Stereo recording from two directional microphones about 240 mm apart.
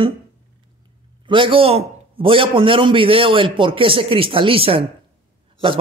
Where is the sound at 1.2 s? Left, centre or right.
Right.